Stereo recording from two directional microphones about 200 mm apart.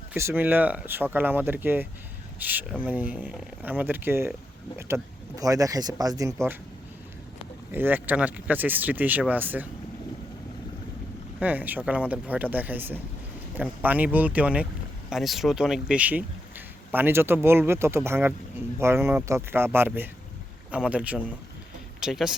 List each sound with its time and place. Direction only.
0.1 s speech: 10° right (ahead or behind)
5.4 s speech: 15° right (ahead or behind)
7.7 s speech: 10° right (ahead or behind)
11.3 s speech: 10° right (ahead or behind)